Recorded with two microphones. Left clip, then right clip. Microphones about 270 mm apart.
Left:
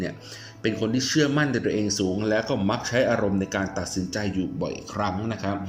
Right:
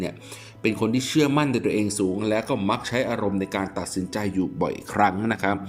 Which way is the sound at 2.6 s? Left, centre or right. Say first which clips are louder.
Even; left.